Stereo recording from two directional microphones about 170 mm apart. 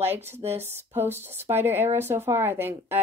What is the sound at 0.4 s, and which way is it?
Speech, 40° right (ahead or behind).